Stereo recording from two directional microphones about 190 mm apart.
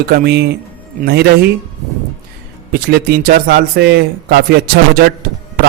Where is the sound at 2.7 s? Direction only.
55° right (ahead or behind).